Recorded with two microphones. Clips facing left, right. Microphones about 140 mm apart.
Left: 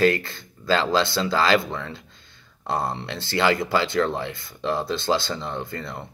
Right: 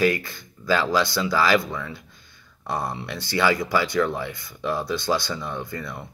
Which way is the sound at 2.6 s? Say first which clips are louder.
Left 2 dB; 25° left (ahead or behind).